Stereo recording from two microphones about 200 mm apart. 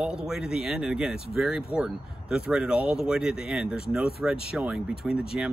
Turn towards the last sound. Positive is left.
turn(degrees=-5)  # may be behind; listen again after turning